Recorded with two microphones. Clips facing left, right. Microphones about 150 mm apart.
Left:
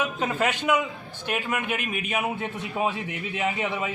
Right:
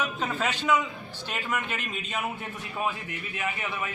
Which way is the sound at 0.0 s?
10° left (ahead or behind).